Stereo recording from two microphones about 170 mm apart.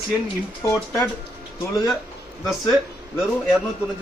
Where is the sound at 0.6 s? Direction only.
15° left (ahead or behind).